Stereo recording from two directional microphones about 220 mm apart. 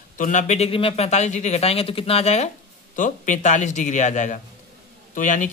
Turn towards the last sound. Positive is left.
turn(degrees=35)  # may be behind; listen again after turning